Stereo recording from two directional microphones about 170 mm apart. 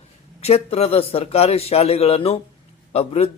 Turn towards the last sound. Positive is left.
turn(degrees=35)  # may be behind; listen again after turning